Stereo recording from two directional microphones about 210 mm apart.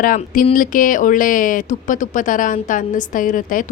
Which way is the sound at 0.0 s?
40° left (ahead or behind).